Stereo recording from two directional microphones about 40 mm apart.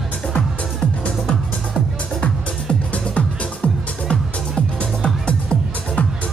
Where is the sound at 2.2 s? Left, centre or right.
Left.